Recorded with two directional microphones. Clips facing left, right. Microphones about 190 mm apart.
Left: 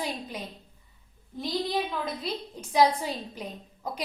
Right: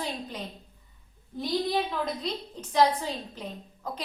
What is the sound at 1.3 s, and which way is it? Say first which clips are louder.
A woman's voice: right 2 dB; centre (ahead or behind).